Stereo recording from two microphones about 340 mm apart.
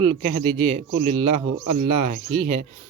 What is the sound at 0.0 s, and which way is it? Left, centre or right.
A man's voice, right.